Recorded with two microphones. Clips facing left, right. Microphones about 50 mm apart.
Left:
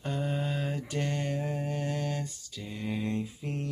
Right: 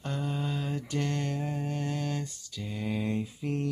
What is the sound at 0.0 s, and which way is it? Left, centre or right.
Mantra, centre.